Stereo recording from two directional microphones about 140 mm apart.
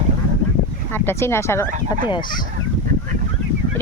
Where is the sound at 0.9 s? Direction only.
15° left (ahead or behind).